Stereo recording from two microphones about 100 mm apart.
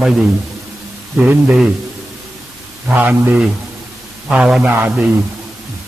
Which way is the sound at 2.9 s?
15° right (ahead or behind).